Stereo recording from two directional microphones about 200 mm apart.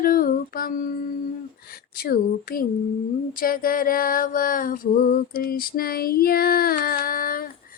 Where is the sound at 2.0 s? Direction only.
45° left (ahead or behind).